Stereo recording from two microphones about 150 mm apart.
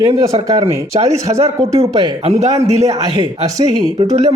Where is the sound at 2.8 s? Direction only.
25° right (ahead or behind).